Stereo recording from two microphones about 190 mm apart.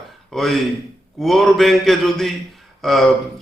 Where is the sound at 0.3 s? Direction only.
Centre (ahead or behind).